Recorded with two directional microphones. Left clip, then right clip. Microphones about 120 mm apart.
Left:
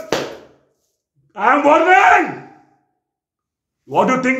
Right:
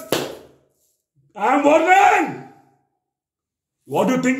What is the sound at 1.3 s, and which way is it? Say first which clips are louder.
Speech: left 3 dB; 20° right (ahead or behind).